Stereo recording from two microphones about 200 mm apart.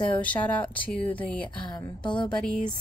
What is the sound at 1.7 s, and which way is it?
Speech, 20° left (ahead or behind).